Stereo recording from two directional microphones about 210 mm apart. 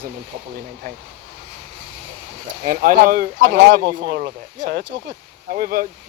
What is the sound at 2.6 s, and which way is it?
Speech, 40° right (ahead or behind).